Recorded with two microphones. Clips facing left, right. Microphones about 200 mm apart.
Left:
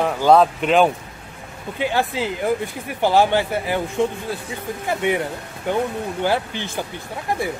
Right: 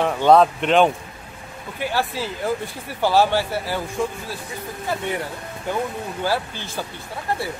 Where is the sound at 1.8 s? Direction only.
20° left (ahead or behind).